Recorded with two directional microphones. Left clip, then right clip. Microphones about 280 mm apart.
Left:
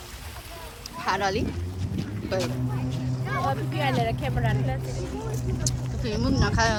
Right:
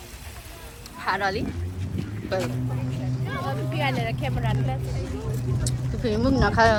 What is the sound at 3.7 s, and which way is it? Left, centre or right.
Speech, left.